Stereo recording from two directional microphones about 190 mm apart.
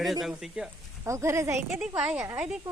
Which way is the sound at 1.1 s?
15° right (ahead or behind).